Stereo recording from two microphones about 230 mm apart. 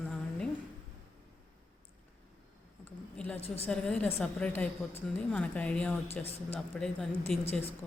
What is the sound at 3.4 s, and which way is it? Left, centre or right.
Speech, left.